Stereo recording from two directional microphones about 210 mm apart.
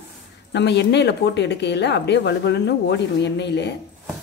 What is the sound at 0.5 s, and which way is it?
A woman's voice, 55° left (ahead or behind).